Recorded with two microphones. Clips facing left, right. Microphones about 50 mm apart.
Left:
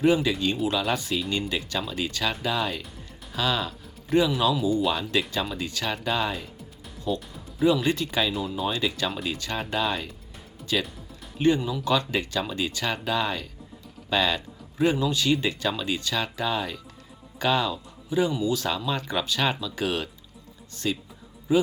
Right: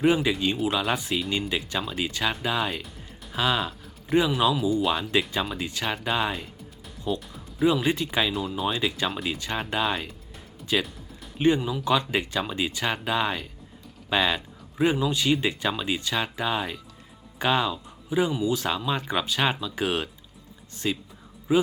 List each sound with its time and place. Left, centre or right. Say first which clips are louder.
0.0 s speech: even; centre
3.7 s a sound: even; centre
4.3 s speech: even; centre
6.3 s music: even; centre
7.6 s speech: even; centre
8.3 s speech: even; centre
9.4 s speech: even; centre
11.3 s a man's voice: even; centre